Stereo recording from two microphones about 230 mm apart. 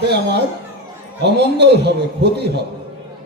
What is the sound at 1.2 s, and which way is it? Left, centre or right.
A man's voice, right.